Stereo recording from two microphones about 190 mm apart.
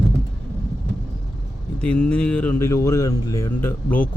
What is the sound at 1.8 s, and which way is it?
Speech, 5° left (ahead or behind).